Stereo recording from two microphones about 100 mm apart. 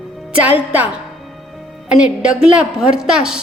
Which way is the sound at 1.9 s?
10° right (ahead or behind).